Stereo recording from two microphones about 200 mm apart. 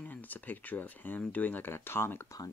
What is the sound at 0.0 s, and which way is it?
Speech, 10° left (ahead or behind).